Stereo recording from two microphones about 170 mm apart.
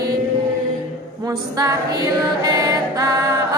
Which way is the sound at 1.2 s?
20° right (ahead or behind).